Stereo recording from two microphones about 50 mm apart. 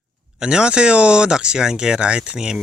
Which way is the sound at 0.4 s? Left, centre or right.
Centre.